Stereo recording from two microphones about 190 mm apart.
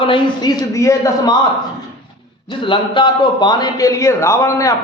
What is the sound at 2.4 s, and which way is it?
A man's voice, 25° left (ahead or behind).